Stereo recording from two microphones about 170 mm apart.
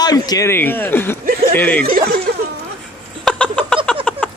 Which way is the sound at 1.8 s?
55° right (ahead or behind).